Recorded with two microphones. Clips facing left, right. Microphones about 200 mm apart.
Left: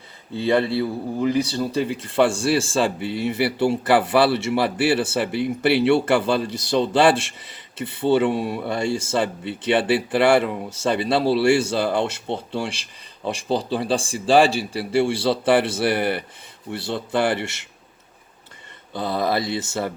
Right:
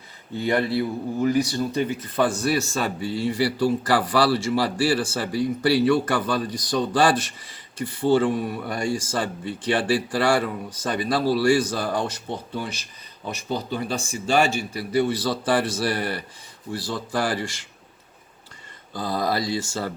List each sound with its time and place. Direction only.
0.3 s speech: 30° left (ahead or behind)
18.9 s speech: 25° left (ahead or behind)